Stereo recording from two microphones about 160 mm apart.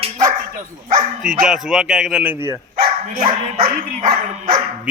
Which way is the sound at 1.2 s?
5° right (ahead or behind).